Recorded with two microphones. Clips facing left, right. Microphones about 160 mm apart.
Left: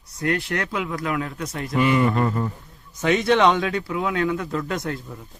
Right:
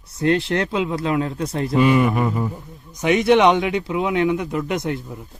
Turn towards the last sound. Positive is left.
turn(degrees=-20)  # may be behind; listen again after turning